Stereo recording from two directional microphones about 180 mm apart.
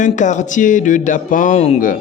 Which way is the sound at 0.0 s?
45° left (ahead or behind).